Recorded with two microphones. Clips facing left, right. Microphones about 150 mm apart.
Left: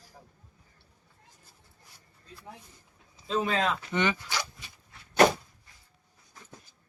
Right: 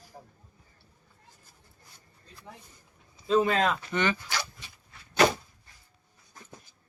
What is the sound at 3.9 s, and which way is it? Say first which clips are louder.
Speech: even; 15° left (ahead or behind).